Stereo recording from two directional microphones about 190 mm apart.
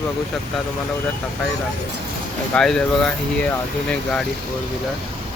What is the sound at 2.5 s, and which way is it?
Speech, centre (ahead or behind).